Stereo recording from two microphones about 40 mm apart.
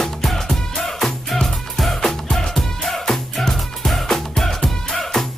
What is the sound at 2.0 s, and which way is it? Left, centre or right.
Music, centre.